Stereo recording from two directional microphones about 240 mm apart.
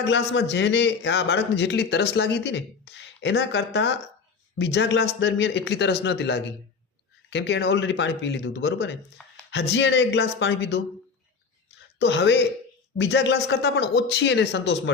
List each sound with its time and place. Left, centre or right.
0.0 s a man's voice: left
11.9 s a man's voice: left